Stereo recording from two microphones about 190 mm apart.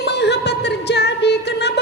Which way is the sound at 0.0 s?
60° left (ahead or behind).